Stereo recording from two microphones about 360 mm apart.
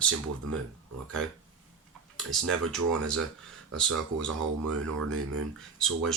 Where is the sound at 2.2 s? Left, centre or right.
Centre.